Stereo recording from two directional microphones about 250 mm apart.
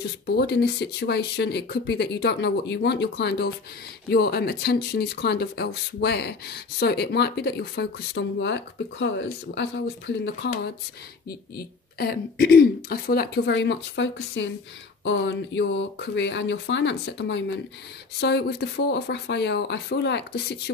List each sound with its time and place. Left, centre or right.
0.4 s speech: left